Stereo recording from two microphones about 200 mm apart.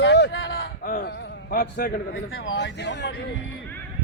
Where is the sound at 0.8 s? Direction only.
45° left (ahead or behind); by 3.1 s 60° left (ahead or behind).